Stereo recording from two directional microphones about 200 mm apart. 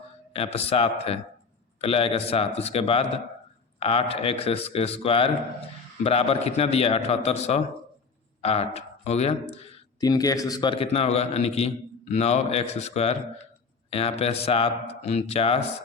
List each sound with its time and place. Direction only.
0.3 s a man's voice: 30° left (ahead or behind)